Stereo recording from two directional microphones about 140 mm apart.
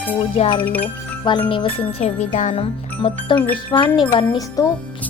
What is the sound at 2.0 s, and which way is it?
Speech, 60° left (ahead or behind).